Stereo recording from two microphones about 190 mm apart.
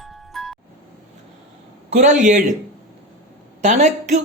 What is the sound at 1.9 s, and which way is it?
Speech, 40° right (ahead or behind).